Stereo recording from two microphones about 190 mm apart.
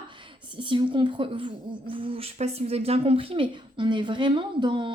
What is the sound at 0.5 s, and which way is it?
Speech, 25° right (ahead or behind).